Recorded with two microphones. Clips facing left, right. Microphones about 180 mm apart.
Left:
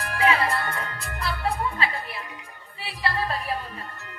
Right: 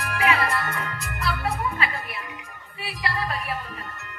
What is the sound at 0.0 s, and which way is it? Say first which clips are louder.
Music: left 1 dB; 30° left (ahead or behind).